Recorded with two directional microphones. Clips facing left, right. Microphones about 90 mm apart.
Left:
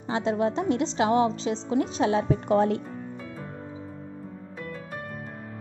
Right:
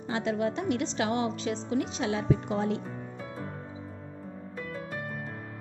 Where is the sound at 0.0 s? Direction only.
25° left (ahead or behind); by 2.8 s 55° left (ahead or behind).